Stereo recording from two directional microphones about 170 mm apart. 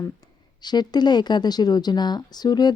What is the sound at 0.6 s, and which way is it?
A woman's voice, 25° left (ahead or behind).